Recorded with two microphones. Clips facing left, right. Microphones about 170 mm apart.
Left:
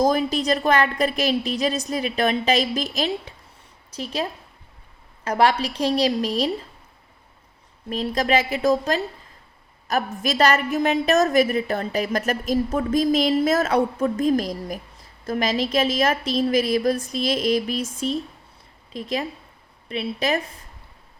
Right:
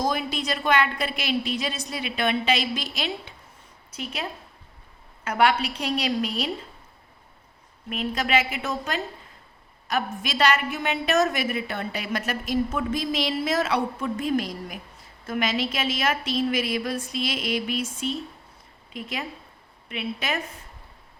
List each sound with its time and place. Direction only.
0.0 s a woman's voice: 40° left (ahead or behind)
7.9 s a woman's voice: 35° left (ahead or behind)